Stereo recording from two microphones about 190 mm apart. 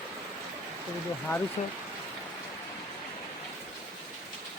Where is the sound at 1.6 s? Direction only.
35° left (ahead or behind).